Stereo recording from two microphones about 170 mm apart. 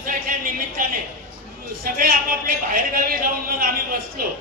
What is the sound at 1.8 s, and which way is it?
A man's voice, 55° right (ahead or behind).